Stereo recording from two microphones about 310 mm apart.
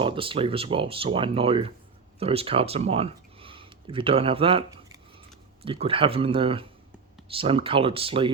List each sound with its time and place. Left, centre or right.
0.0 s speech: centre